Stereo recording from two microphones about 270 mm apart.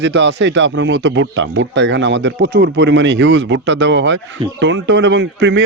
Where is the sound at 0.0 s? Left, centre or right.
Right.